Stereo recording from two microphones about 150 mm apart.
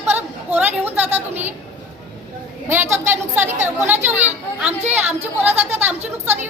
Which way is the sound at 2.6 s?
15° right (ahead or behind).